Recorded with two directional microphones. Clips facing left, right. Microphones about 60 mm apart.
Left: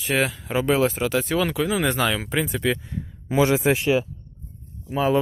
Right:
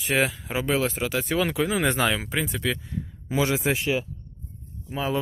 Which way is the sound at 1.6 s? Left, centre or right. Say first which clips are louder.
Left 1 dB; right.